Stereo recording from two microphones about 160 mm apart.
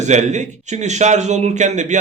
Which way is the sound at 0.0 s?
45° right (ahead or behind).